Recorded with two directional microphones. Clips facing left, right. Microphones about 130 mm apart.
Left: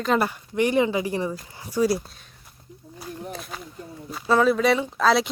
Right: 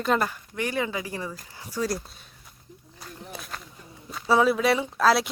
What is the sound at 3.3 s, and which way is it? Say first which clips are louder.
Speech: left 4 dB; centre (ahead or behind).